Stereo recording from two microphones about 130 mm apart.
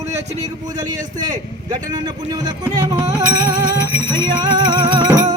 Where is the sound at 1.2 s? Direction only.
30° right (ahead or behind).